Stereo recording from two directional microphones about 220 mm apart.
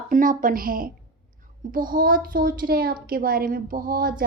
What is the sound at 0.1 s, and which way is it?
A woman's voice, 35° right (ahead or behind).